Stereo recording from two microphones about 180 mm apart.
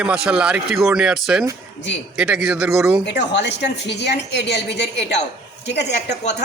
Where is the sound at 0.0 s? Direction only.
5° right (ahead or behind).